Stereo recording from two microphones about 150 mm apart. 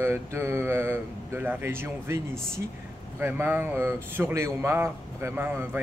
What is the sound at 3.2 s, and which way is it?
Speech, 15° right (ahead or behind).